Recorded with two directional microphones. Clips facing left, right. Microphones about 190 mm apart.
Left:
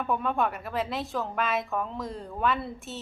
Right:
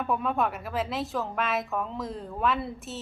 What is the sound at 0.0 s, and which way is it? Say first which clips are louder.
A woman's voice: even; centre (ahead or behind).